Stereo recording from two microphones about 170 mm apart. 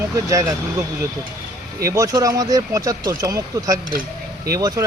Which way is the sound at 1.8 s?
20° right (ahead or behind).